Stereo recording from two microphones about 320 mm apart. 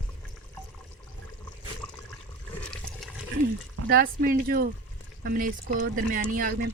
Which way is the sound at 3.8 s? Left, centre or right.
Right.